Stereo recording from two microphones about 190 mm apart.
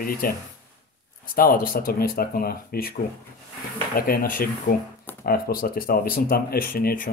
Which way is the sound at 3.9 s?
50° left (ahead or behind).